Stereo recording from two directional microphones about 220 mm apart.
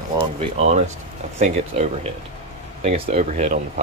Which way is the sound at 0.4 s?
30° right (ahead or behind).